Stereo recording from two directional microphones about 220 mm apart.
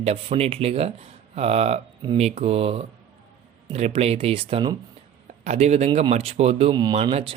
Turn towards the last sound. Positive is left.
turn(degrees=-25)  # may be behind; listen again after turning